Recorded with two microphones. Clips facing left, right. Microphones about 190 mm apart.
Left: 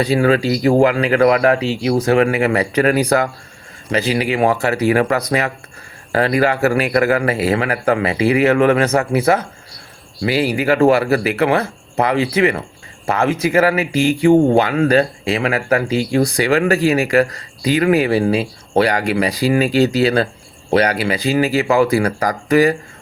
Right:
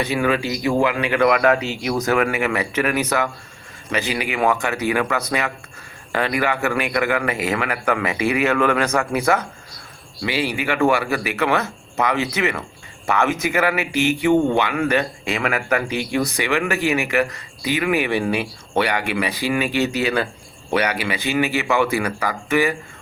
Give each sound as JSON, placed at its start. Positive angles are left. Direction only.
{"t": 0.0, "sound": "speech", "side_deg": 35}
{"t": 10.5, "sound": "speech", "side_deg": 35}